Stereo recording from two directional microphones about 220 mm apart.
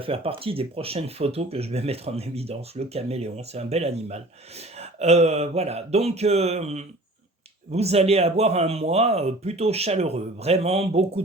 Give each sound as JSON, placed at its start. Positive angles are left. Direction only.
{"t": 0.0, "sound": "speech", "side_deg": -25}